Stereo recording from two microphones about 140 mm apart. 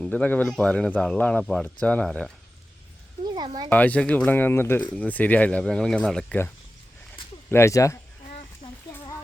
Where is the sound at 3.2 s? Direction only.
30° right (ahead or behind).